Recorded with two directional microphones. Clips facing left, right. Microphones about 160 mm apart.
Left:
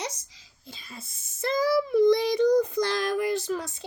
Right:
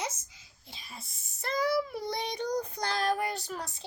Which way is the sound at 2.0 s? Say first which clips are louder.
Left 13 dB; 90° left.